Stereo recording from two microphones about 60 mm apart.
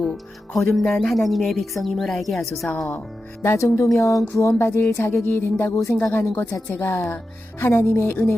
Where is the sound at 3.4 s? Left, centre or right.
Left.